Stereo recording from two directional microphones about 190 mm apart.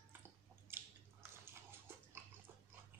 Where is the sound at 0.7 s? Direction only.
10° right (ahead or behind).